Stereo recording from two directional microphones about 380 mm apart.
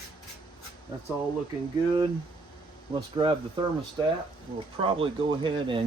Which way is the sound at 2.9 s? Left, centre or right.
Centre.